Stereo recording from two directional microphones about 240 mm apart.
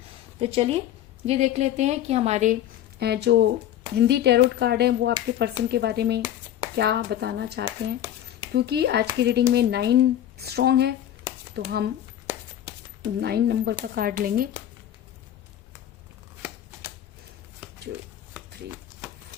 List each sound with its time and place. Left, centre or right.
0.3 s a woman's voice: right
3.0 s speech: right
13.0 s speech: right
17.9 s speech: right